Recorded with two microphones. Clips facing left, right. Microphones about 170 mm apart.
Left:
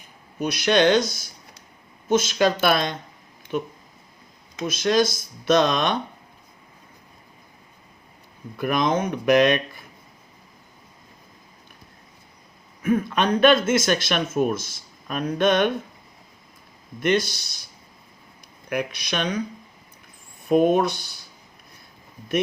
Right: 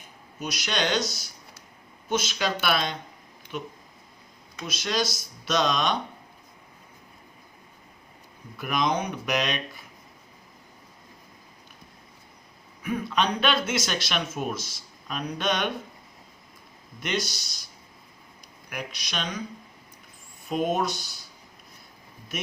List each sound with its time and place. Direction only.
0.3 s a man's voice: 55° left (ahead or behind)
8.5 s a man's voice: 55° left (ahead or behind)
12.8 s a man's voice: 50° left (ahead or behind)
17.0 s speech: 55° left (ahead or behind)
18.7 s speech: 55° left (ahead or behind)
20.5 s speech: 55° left (ahead or behind)